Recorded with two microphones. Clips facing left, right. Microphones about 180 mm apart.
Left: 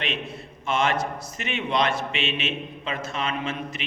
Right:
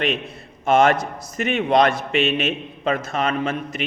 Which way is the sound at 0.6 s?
45° right (ahead or behind).